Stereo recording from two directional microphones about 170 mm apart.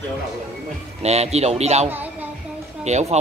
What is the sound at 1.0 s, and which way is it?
Speech, 40° right (ahead or behind).